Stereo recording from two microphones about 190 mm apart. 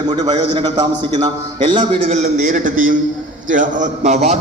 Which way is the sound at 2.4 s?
40° right (ahead or behind).